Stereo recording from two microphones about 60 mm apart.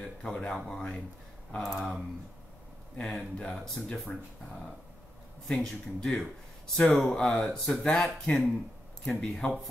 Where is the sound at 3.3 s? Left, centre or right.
Centre.